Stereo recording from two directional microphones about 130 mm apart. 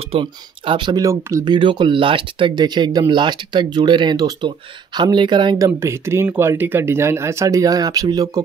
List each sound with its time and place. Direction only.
0.1 s speech: 40° right (ahead or behind); by 1.5 s 25° right (ahead or behind)
1.5 s speech: 35° right (ahead or behind)
5.8 s speech: 20° right (ahead or behind)